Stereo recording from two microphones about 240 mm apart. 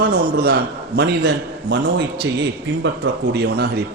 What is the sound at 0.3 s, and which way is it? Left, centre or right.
Speech, right.